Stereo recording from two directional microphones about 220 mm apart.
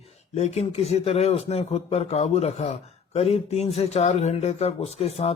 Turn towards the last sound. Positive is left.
turn(degrees=30)  # may be behind; listen again after turning